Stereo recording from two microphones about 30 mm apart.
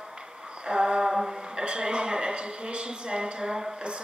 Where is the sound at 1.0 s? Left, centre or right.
Right.